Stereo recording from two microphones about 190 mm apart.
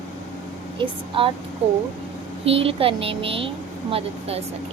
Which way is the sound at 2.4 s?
30° right (ahead or behind).